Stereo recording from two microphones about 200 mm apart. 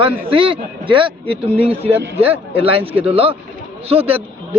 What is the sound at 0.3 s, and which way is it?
A man's voice, 25° right (ahead or behind).